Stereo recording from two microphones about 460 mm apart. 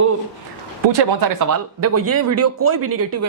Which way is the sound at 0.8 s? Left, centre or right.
Right.